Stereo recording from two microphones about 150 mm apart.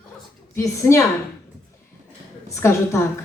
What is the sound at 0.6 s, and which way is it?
Speech, 20° left (ahead or behind).